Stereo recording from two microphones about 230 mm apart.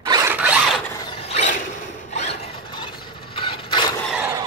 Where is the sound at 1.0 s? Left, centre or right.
Left.